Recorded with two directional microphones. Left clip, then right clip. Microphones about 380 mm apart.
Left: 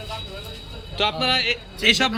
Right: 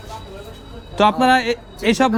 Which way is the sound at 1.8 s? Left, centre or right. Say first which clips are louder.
Right 1 dB; right.